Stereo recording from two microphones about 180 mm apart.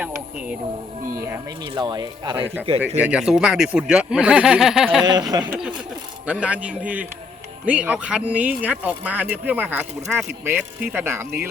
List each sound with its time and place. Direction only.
1.2 s speech: 20° right (ahead or behind)
3.0 s speech: 5° right (ahead or behind)
5.3 s speech: 20° right (ahead or behind)
6.2 s speech: 5° right (ahead or behind)